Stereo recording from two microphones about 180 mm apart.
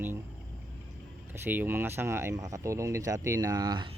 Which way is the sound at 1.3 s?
10° right (ahead or behind).